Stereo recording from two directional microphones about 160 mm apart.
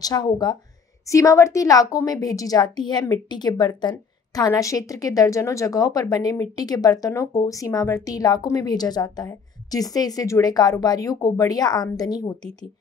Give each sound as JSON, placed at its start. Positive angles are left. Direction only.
{"t": 0.0, "sound": "speech", "side_deg": 25}